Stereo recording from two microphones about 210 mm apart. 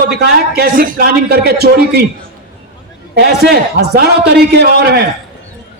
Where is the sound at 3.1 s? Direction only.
50° right (ahead or behind).